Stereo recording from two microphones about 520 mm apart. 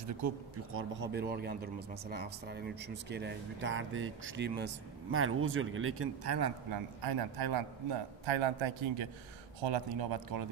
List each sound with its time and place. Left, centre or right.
0.7 s speech: centre; by 8.0 s right
8.3 s a man's voice: right
9.6 s speech: right